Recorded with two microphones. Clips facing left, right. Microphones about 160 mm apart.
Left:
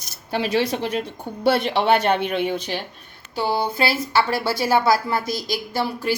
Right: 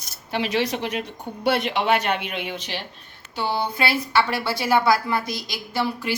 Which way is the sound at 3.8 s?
30° left (ahead or behind).